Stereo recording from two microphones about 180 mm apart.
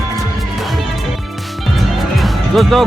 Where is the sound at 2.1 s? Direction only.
Centre (ahead or behind).